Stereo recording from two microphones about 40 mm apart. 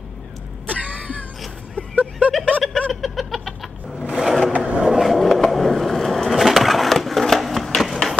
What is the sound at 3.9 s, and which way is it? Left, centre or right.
Sewing machine, centre.